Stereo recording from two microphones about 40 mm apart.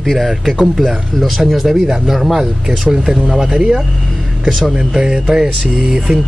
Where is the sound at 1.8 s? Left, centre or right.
Centre.